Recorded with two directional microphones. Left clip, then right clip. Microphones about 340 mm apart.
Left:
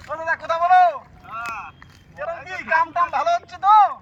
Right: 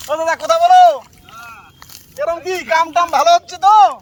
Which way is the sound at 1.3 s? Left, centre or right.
Centre.